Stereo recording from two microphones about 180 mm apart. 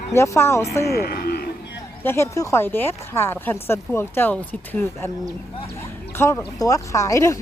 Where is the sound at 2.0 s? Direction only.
15° left (ahead or behind).